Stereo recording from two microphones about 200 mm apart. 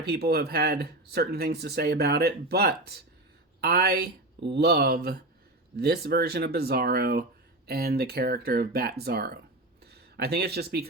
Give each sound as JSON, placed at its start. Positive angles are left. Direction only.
{"t": 0.1, "sound": "speech", "side_deg": -50}